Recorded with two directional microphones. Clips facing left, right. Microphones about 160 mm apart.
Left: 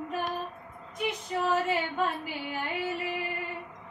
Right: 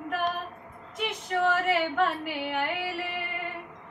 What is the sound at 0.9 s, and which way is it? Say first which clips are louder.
Female singing: right 2 dB; 80° right.